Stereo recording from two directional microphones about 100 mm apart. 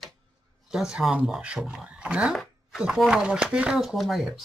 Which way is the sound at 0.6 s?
5° right (ahead or behind).